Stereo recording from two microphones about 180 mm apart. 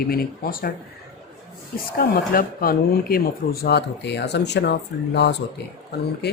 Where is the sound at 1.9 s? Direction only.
55° left (ahead or behind); by 4.7 s 70° left (ahead or behind).